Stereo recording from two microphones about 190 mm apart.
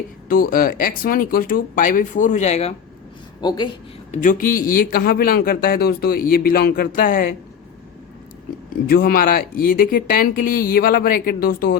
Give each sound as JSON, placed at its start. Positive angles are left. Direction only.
{"t": 0.3, "sound": "a man's voice", "side_deg": 50}
{"t": 3.4, "sound": "speech", "side_deg": 20}
{"t": 4.1, "sound": "a man's voice", "side_deg": 45}
{"t": 8.9, "sound": "a man's voice", "side_deg": 50}